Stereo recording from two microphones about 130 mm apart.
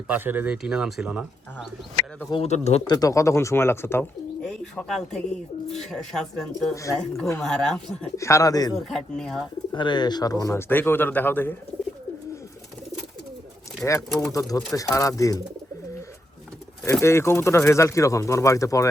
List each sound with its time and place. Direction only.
0.1 s speech: 15° right (ahead or behind)
2.3 s a man's voice: 55° left (ahead or behind)
2.8 s speech: 30° left (ahead or behind)
4.4 s speech: 5° left (ahead or behind)
7.1 s speech: 25° left (ahead or behind)
7.4 s speech: 5° left (ahead or behind)
8.1 s speech: 25° left (ahead or behind)
8.9 s speech: 5° left (ahead or behind)
9.7 s speech: 35° left (ahead or behind); by 11.5 s 15° left (ahead or behind)
14.1 s speech: 5° left (ahead or behind)
14.3 s speech: 25° left (ahead or behind)
16.8 s speech: 20° left (ahead or behind)